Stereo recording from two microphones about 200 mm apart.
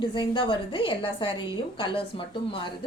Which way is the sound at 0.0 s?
25° left (ahead or behind).